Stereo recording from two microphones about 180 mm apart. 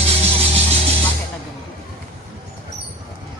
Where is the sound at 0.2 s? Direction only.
35° right (ahead or behind).